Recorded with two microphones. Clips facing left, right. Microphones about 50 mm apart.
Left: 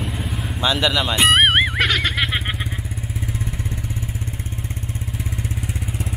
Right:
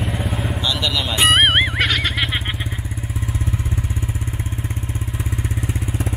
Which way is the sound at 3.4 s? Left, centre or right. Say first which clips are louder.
Right 3 dB; centre.